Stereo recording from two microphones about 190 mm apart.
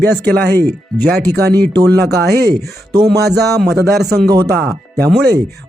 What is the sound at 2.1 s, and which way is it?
Speech, 60° right (ahead or behind).